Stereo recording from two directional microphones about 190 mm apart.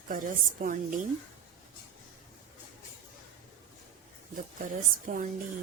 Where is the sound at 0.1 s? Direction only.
45° right (ahead or behind).